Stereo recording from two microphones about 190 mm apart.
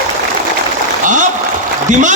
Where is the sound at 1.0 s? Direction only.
40° right (ahead or behind).